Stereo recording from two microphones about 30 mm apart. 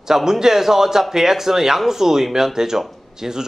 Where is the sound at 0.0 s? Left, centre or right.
Centre.